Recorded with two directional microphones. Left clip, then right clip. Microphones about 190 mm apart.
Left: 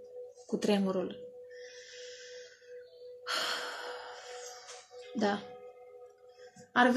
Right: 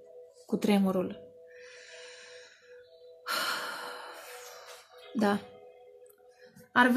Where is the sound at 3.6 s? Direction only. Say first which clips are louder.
Right 2 dB; 55° right (ahead or behind).